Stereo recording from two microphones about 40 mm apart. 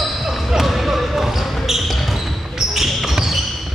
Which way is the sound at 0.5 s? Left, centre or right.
Centre.